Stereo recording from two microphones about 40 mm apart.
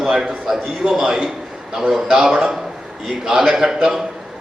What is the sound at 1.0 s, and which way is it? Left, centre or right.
A man's voice, right.